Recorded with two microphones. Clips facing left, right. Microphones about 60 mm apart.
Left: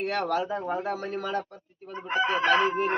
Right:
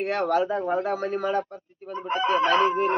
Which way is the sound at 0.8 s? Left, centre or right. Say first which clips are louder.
Right 5 dB; right.